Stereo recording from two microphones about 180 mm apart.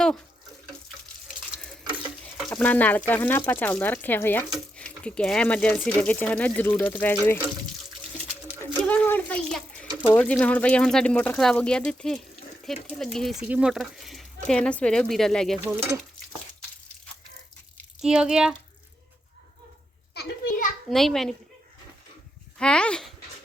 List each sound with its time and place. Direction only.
0.0 s water tap: 5° left (ahead or behind)
2.2 s speech: 10° left (ahead or behind)
8.8 s a sound: 10° left (ahead or behind)
10.2 s speech: 5° left (ahead or behind)
15.6 s speech: 10° right (ahead or behind)
18.0 s speech: 5° right (ahead or behind)
20.1 s children playing: 55° left (ahead or behind)
20.9 s speech: centre (ahead or behind)
22.5 s speech: 5° left (ahead or behind)